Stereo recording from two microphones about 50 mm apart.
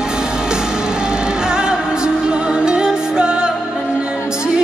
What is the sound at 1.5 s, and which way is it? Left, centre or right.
Music, centre.